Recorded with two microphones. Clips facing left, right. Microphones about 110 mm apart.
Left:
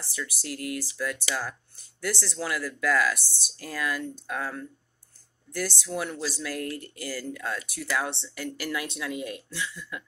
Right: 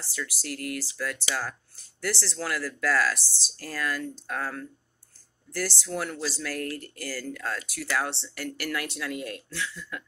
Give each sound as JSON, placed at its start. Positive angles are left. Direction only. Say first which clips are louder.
{"t": 0.4, "sound": "speech", "louder": "left 1 dB", "side_deg": 15}